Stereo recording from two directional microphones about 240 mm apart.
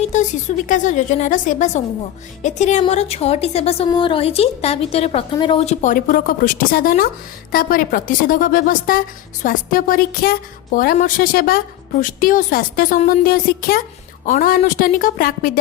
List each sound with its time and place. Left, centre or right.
0.1 s a woman's voice: left